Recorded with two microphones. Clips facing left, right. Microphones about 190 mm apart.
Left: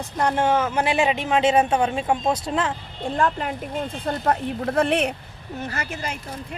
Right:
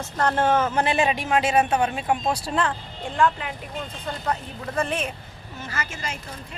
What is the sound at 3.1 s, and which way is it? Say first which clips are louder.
Speech: even; 40° left (ahead or behind).